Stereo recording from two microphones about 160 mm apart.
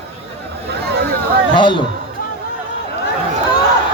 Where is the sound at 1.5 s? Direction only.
30° left (ahead or behind).